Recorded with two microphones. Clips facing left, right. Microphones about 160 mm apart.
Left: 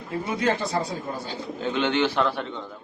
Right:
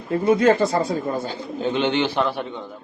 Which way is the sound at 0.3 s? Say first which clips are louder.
Right 3 dB; 50° right (ahead or behind).